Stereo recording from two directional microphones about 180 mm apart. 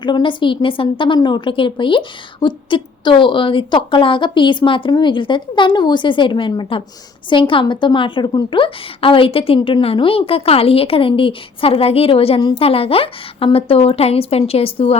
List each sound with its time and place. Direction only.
0.0 s a woman's voice: 25° left (ahead or behind)